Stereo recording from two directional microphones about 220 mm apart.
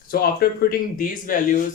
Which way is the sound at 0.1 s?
45° left (ahead or behind).